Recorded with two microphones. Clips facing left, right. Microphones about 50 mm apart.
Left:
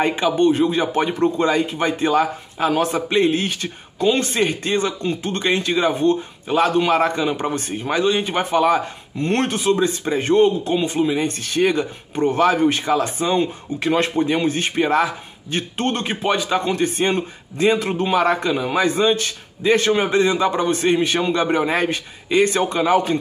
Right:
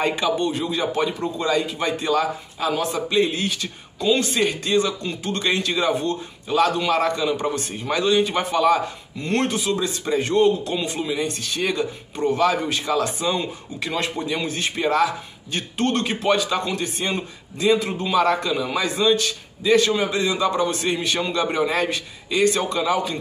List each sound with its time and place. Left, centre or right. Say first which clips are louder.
0.0 s speech: left 4 dB; left
9.2 s speech: left 3 dB; left
11.2 s speech: left 6 dB; left